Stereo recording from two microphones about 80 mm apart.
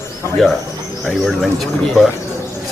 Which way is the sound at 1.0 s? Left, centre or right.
Centre.